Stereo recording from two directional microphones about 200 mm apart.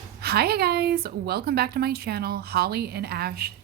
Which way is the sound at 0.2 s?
50° right (ahead or behind).